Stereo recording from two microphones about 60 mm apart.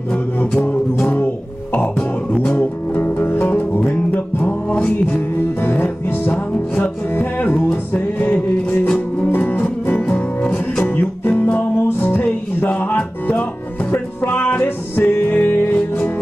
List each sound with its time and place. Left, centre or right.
1.0 s music: left
5.6 s music: left
10.9 s music: left